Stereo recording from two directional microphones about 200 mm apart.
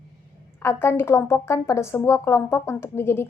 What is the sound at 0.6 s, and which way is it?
Speech, 15° left (ahead or behind).